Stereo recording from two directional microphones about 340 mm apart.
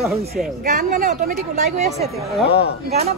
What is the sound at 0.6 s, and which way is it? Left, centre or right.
Speech, right.